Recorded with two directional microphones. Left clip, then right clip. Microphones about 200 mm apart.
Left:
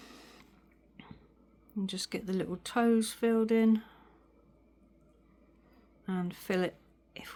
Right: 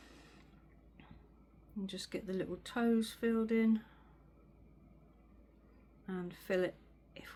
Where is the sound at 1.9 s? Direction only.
60° left (ahead or behind).